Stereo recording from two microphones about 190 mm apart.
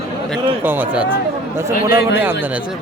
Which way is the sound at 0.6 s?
10° right (ahead or behind).